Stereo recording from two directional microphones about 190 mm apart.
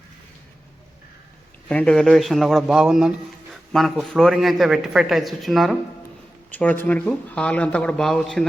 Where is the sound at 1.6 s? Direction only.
5° left (ahead or behind).